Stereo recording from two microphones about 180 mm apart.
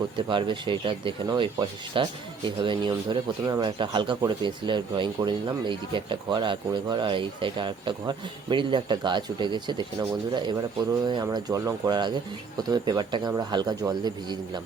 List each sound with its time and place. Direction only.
0.2 s speech: 25° right (ahead or behind)